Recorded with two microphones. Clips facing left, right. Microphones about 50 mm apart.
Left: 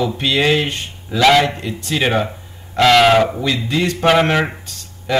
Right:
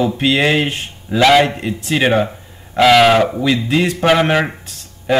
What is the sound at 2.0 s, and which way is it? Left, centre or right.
Speech, centre.